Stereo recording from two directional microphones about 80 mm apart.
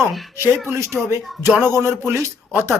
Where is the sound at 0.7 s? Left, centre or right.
Right.